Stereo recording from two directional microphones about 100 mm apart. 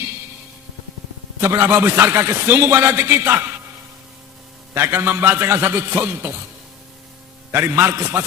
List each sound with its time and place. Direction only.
1.4 s a man's voice: 25° right (ahead or behind)
4.7 s a man's voice: 25° right (ahead or behind)
7.5 s a man's voice: 25° right (ahead or behind)